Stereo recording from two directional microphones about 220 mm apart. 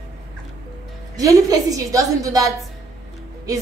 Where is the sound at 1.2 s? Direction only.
15° right (ahead or behind).